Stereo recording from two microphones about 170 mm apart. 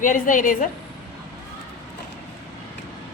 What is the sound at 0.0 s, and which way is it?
Speech, 50° left (ahead or behind).